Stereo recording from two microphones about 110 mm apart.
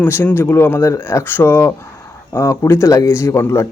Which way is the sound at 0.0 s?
20° left (ahead or behind).